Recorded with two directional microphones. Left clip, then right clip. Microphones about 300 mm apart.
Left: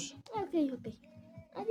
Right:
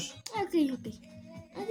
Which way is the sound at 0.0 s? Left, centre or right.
Left.